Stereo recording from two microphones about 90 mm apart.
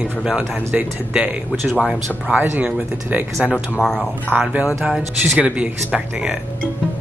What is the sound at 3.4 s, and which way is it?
Speech, centre (ahead or behind).